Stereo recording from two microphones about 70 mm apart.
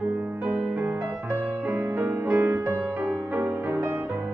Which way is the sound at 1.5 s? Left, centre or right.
Right.